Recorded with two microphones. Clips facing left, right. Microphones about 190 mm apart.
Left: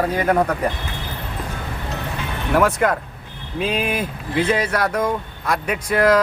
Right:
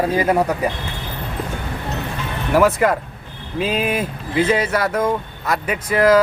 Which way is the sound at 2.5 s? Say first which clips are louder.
Right 2 dB; 5° right (ahead or behind).